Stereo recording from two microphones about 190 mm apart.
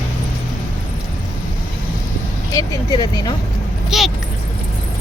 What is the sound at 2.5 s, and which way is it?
Speech, 20° left (ahead or behind).